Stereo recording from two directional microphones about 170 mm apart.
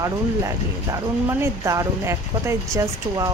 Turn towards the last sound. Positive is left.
turn(degrees=-20)  # may be behind; listen again after turning